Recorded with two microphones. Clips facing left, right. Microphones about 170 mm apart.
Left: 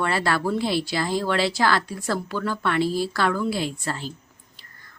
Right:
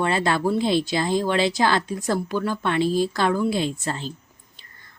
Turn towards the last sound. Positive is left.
turn(degrees=-20)  # may be behind; listen again after turning